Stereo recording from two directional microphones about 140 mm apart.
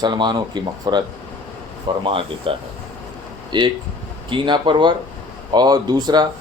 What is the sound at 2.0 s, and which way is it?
Speech, 40° right (ahead or behind).